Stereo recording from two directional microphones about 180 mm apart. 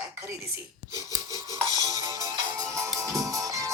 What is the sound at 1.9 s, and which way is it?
Music, 20° right (ahead or behind).